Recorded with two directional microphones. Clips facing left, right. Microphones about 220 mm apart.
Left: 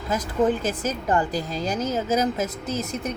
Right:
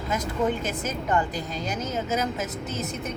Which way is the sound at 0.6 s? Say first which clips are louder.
Left 3 dB; 30° left (ahead or behind).